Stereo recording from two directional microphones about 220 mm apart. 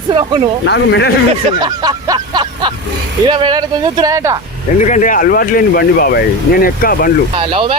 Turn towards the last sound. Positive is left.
turn(degrees=-25)  # may be behind; listen again after turning